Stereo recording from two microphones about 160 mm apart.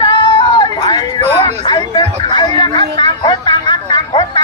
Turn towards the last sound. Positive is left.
turn(degrees=30)  # may be behind; listen again after turning